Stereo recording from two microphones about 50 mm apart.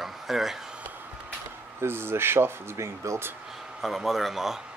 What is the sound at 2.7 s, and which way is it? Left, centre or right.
Speech, right.